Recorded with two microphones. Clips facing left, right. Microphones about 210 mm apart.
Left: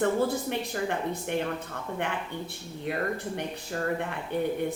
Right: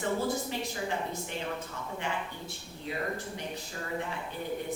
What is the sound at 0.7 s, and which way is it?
Speech, 60° left (ahead or behind).